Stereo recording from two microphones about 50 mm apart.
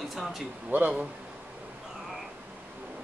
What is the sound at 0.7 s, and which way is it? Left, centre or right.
Speech, right.